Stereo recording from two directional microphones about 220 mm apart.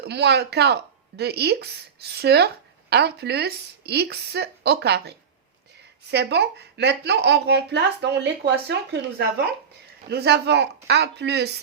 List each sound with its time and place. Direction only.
0.0 s speech: 50° right (ahead or behind)